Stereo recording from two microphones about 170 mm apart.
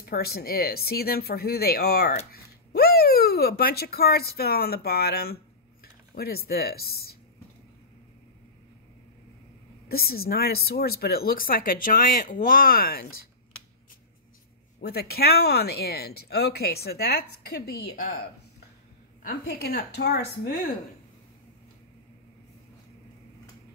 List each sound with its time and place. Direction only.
0.0 s speech: 65° left (ahead or behind)
9.8 s speech: 65° left (ahead or behind)
14.8 s speech: 70° left (ahead or behind)
19.2 s speech: 65° left (ahead or behind)